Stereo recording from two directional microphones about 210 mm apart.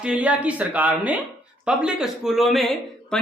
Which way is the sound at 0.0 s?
5° right (ahead or behind).